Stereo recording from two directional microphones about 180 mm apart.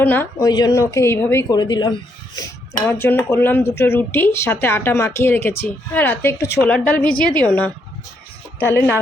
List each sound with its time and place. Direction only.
0.0 s speech: 10° left (ahead or behind)
2.8 s speech: 10° left (ahead or behind)